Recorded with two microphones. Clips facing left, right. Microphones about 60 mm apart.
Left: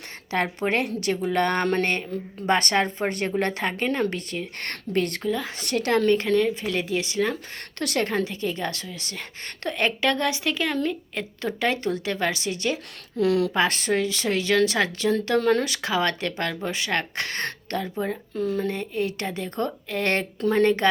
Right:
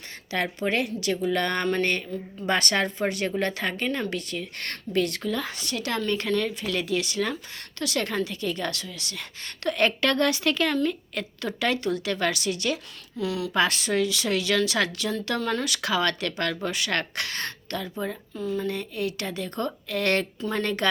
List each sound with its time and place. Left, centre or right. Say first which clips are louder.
0.3 s a woman's voice: left 2 dB; left
5.3 s a woman's voice: left 2 dB; centre
5.5 s a woman's voice: left 7 dB; left
7.8 s a woman's voice: left 3 dB; left
9.7 s a woman's voice: even; centre
13.1 s speech: left 7 dB; left
13.5 s a woman's voice: left 1 dB; left
17.2 s a woman's voice: left 3 dB; left